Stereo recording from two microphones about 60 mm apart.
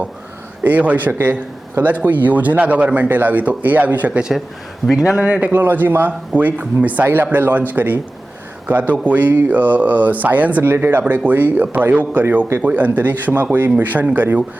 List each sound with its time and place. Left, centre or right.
0.6 s a man's voice: right
4.9 s speech: centre
5.5 s speech: right
9.0 s a man's voice: right
10.6 s speech: right
11.0 s a man's voice: right